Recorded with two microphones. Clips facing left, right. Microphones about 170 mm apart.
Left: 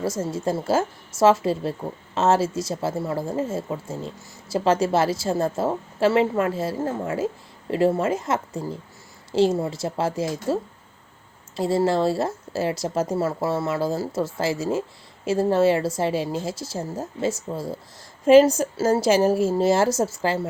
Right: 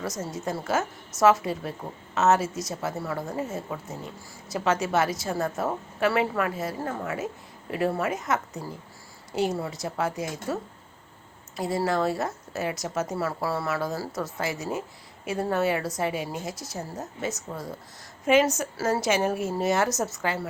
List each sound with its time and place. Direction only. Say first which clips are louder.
0.0 s a woman's voice: left 6 dB; 30° left (ahead or behind)